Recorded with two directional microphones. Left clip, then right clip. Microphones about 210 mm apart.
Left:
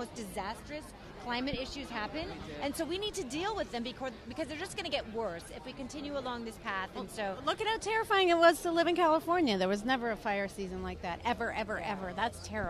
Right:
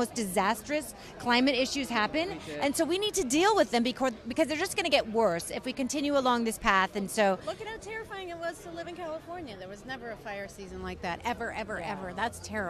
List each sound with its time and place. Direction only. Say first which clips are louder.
0.0 s a woman's voice: right 11 dB; 30° right (ahead or behind)
7.4 s speech: left 5 dB; 40° left (ahead or behind)
8.1 s speech: left 16 dB; 90° left; by 10.5 s 50° left (ahead or behind)
11.1 s speech: right 1 dB; 10° left (ahead or behind)